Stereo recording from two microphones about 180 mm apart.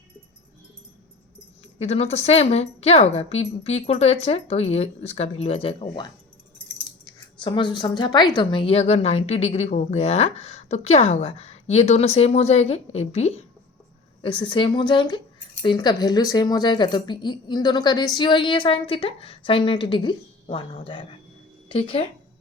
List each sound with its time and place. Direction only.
1.8 s speech: 35° left (ahead or behind)